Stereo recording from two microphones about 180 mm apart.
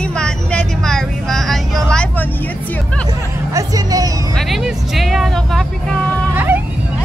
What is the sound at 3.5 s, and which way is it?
Speech, 20° right (ahead or behind).